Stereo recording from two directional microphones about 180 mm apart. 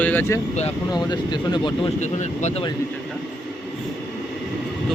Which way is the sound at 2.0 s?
40° left (ahead or behind).